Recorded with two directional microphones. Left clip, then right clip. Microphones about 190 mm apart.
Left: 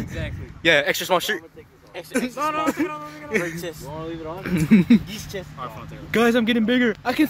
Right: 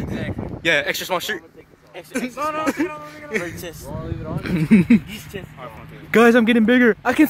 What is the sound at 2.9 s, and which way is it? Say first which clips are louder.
Speech: left 1 dB; 55° left (ahead or behind).